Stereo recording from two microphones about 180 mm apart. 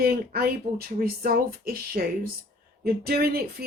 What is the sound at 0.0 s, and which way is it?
A woman's voice, 55° right (ahead or behind).